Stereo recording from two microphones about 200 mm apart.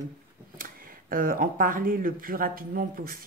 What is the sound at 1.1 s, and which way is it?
Speech, 45° right (ahead or behind).